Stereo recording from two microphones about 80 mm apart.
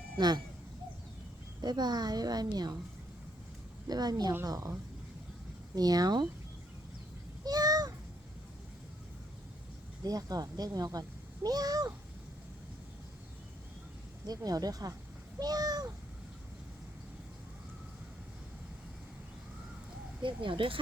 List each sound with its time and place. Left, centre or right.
0.2 s a woman's voice: right
1.6 s a woman's voice: right
3.8 s a woman's voice: right
5.7 s a woman's voice: right
7.4 s a sound: right
10.0 s speech: right
14.3 s speech: right
20.2 s speech: right